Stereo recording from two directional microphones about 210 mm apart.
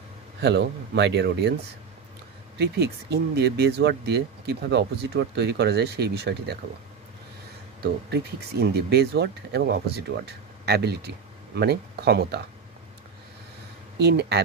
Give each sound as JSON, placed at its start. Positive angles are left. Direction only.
{"t": 0.4, "sound": "speech", "side_deg": -55}
{"t": 2.6, "sound": "speech", "side_deg": -55}
{"t": 7.8, "sound": "speech", "side_deg": -50}
{"t": 13.9, "sound": "speech", "side_deg": -50}